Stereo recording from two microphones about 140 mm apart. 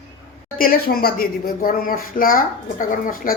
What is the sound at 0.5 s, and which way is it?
Speech, 90° left.